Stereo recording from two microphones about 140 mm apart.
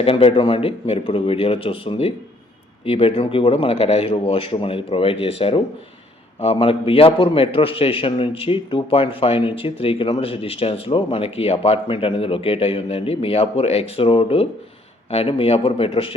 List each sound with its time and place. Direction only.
0.0 s a man's voice: 40° left (ahead or behind)